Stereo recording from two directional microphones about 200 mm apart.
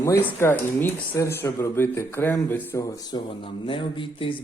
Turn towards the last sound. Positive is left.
turn(degrees=25)  # may be behind; listen again after turning